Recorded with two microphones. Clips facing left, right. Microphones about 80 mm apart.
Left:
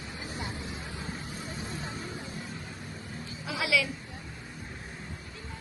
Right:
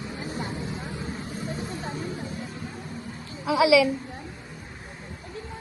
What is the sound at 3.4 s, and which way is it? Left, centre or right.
Speech, centre.